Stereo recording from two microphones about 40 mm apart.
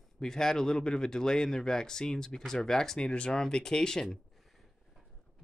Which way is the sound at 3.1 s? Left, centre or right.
Left.